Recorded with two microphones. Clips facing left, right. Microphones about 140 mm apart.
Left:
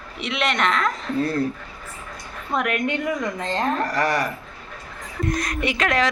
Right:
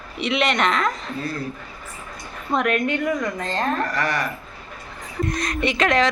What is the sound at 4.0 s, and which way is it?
Speech, 35° left (ahead or behind).